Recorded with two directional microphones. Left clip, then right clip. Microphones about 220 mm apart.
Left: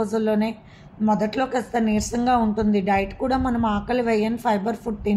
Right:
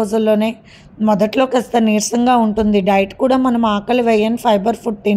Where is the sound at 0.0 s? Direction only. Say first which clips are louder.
Right 8 dB; 35° right (ahead or behind).